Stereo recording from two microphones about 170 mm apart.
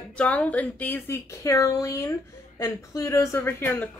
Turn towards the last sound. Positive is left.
turn(degrees=10)  # may be behind; listen again after turning